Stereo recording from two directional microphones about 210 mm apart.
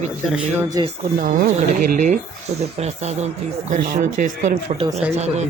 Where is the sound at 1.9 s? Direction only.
35° right (ahead or behind).